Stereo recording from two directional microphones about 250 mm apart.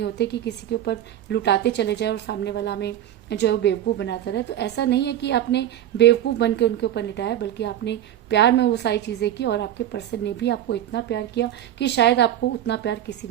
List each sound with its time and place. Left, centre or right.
0.0 s a woman's voice: left